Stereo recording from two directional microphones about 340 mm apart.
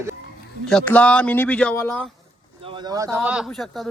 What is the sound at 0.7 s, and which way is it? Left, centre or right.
Speech, centre.